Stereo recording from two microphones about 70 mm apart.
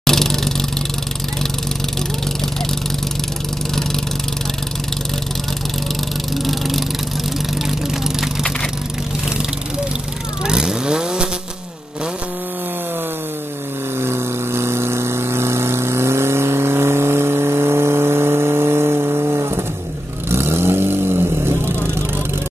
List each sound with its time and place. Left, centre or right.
0.0 s vehicle: centre
6.3 s vehicle: centre
10.4 s vehicle: centre
13.9 s vehicle: right